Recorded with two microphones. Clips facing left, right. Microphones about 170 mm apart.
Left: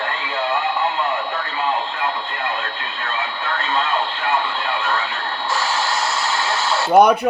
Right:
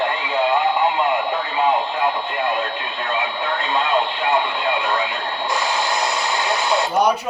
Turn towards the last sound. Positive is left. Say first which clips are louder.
# left 6 dB
turn(degrees=60)  # may be behind; listen again after turning